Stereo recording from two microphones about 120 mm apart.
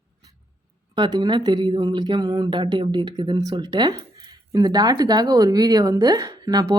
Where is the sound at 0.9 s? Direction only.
35° right (ahead or behind).